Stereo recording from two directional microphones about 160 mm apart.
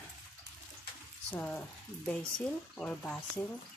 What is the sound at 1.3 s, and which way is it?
Speech, 5° left (ahead or behind).